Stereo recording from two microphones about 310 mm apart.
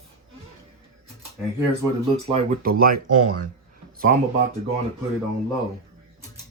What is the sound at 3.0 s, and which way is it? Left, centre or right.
Speech, right.